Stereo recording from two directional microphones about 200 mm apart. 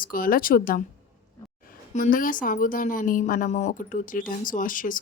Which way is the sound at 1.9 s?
40° left (ahead or behind).